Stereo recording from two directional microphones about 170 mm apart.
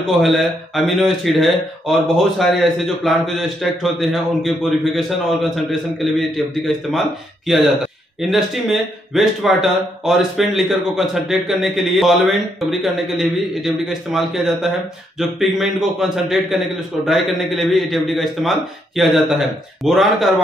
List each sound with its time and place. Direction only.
0.2 s speech: centre (ahead or behind)
8.2 s speech: centre (ahead or behind)